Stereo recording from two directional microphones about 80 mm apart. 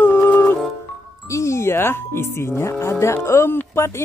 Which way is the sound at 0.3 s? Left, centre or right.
Left.